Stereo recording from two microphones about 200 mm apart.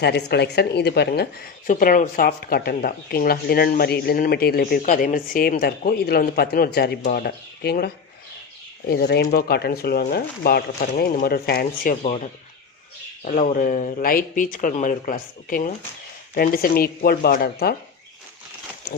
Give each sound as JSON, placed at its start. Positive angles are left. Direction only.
{"t": 0.0, "sound": "speech", "side_deg": 55}
{"t": 8.9, "sound": "speech", "side_deg": 50}